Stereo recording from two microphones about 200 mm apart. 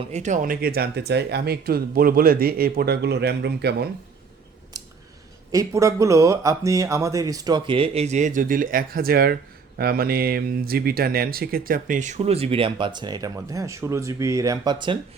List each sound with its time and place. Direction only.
0.1 s speech: 35° right (ahead or behind); by 3.8 s 55° right (ahead or behind)
5.5 s speech: 15° right (ahead or behind)